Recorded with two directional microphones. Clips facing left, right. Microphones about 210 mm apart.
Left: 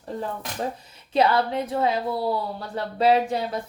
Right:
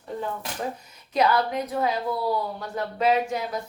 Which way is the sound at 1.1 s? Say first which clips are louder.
Left 2 dB; 30° left (ahead or behind).